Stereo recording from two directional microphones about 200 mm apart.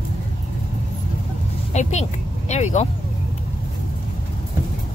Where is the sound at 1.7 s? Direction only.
35° left (ahead or behind).